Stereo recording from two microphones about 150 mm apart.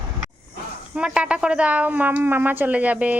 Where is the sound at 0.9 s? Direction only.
5° right (ahead or behind).